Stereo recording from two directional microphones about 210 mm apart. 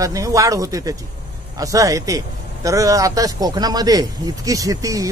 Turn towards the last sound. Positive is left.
turn(degrees=-15)  # may be behind; listen again after turning